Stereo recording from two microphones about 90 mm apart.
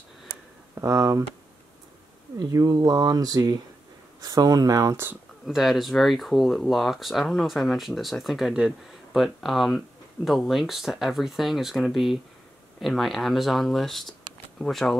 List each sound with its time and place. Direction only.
0.7 s speech: 35° right (ahead or behind)
2.3 s speech: 45° right (ahead or behind)
5.4 s speech: centre (ahead or behind)